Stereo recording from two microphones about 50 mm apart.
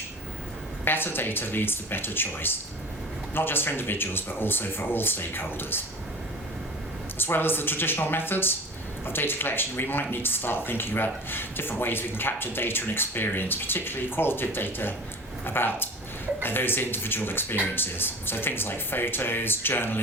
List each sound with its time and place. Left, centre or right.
0.9 s speech: left
7.2 s speech: left